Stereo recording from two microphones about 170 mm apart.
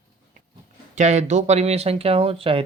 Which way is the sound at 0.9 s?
45° right (ahead or behind).